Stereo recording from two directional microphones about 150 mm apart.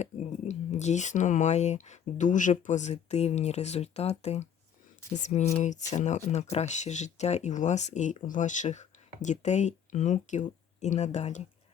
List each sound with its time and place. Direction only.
0.0 s speech: 50° left (ahead or behind)